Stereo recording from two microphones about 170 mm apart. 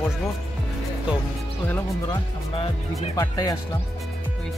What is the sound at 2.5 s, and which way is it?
Speech, 35° left (ahead or behind).